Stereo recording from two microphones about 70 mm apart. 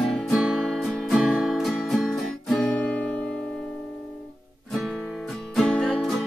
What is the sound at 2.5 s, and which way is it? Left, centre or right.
Music, left.